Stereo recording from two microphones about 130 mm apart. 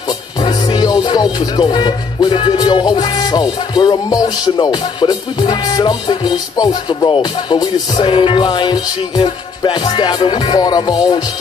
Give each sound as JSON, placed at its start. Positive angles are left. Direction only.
{"t": 0.4, "sound": "music", "side_deg": 30}